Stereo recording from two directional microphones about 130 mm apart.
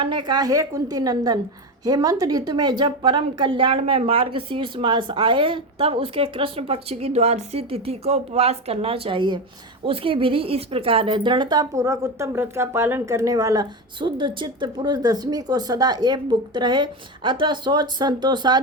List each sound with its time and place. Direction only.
0.0 s a woman's voice: 35° right (ahead or behind)